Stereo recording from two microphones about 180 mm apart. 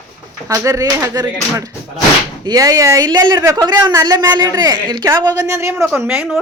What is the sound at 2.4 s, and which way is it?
A woman's voice, 20° right (ahead or behind).